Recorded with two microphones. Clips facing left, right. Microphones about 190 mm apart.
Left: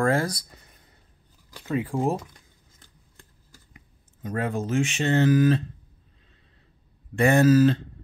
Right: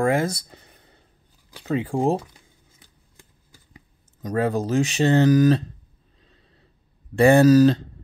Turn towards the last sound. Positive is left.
turn(degrees=-40)  # may be behind; listen again after turning